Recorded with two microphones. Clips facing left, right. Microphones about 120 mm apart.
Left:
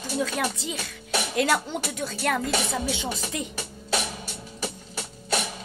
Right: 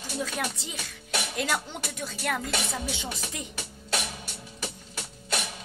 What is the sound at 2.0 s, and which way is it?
Speech, 65° left (ahead or behind).